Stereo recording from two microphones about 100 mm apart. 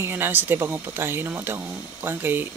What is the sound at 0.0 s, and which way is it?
Speech, 20° right (ahead or behind).